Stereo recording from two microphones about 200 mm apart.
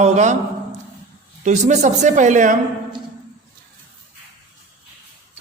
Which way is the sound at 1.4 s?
35° right (ahead or behind).